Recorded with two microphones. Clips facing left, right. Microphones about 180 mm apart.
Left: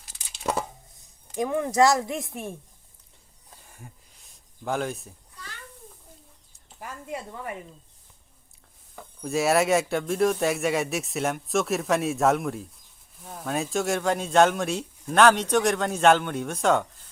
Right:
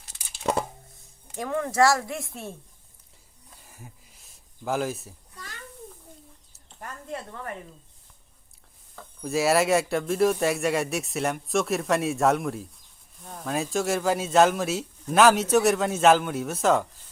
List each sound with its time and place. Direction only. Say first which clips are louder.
0.4 s chopping: right 2 dB; centre (ahead or behind)
1.4 s a woman's voice: left 2 dB; 15° left (ahead or behind)
3.6 s a sound: even; centre (ahead or behind)
6.7 s a woman's voice: left 1 dB; 5° left (ahead or behind)
9.2 s a man's voice: even; centre (ahead or behind)